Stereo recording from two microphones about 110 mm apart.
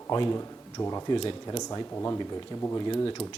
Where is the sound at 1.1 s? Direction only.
50° left (ahead or behind).